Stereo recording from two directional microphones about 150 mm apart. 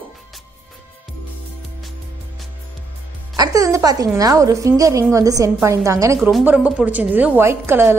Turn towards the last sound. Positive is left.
turn(degrees=-15)  # may be behind; listen again after turning